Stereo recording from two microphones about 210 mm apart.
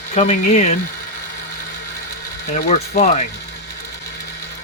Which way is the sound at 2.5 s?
35° left (ahead or behind).